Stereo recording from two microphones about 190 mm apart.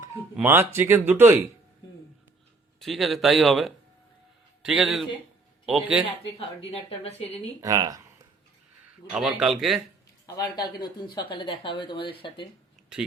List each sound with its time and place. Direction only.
0.3 s speech: 10° right (ahead or behind)
2.8 s speech: centre (ahead or behind)
6.3 s speech: 30° left (ahead or behind)
7.6 s speech: 20° right (ahead or behind)
9.0 s speech: 5° right (ahead or behind)
10.2 s speech: 20° left (ahead or behind)